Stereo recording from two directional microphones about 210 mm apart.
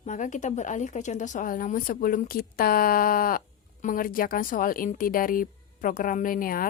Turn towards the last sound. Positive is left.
turn(degrees=40)  # may be behind; listen again after turning